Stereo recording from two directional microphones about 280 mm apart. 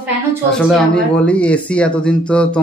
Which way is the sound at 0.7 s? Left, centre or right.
Centre.